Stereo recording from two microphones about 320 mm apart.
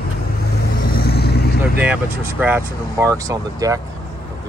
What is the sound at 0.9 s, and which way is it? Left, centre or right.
Vehicle, left.